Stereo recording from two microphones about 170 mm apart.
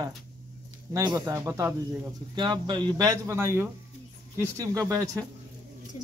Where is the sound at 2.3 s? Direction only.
25° right (ahead or behind).